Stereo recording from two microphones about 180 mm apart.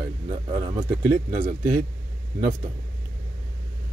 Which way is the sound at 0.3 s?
30° right (ahead or behind).